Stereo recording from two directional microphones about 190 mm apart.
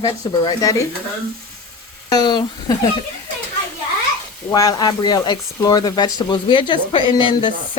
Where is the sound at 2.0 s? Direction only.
20° left (ahead or behind).